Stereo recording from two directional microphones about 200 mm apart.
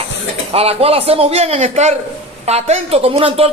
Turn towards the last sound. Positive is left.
turn(degrees=-30)  # may be behind; listen again after turning